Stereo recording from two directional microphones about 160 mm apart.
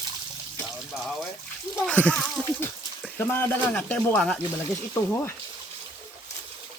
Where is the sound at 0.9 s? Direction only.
Centre (ahead or behind).